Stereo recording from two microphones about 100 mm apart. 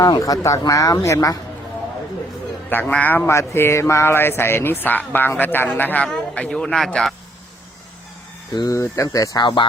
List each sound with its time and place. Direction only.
0.2 s speech: 30° left (ahead or behind)
2.6 s a sound: 20° left (ahead or behind)
5.4 s speech: 15° left (ahead or behind); by 7.1 s centre (ahead or behind)
8.5 s speech: 40° left (ahead or behind)
8.8 s speech: 30° left (ahead or behind)